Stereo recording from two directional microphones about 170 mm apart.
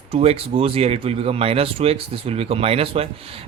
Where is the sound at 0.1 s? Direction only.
35° right (ahead or behind).